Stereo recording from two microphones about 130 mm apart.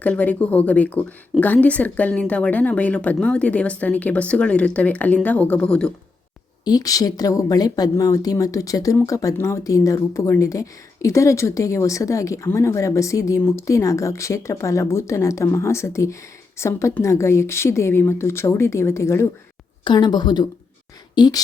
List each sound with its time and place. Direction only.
0.0 s speech: 10° left (ahead or behind)
6.7 s speech: 30° left (ahead or behind)
19.8 s speech: 35° left (ahead or behind)